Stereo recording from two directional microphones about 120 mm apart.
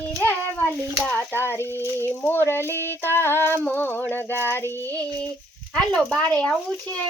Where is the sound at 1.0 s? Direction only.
15° left (ahead or behind).